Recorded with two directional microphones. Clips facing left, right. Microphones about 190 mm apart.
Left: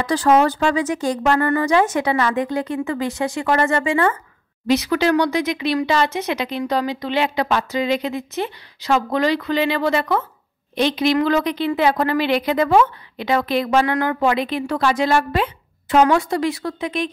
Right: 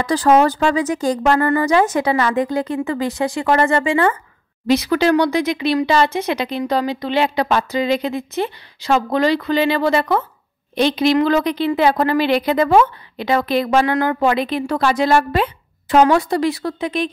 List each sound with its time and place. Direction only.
0.0 s speech: 35° right (ahead or behind)